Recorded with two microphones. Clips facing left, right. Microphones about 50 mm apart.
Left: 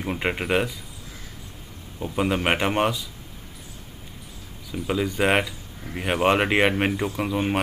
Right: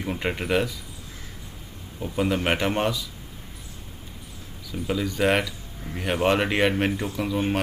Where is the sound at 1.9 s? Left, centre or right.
Centre.